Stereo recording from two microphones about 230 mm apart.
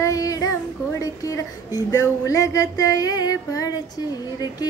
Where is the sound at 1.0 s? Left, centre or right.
Centre.